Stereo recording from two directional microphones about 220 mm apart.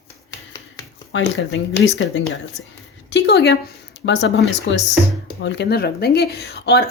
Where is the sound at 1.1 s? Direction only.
60° left (ahead or behind).